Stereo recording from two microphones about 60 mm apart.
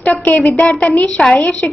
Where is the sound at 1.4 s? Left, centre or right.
Left.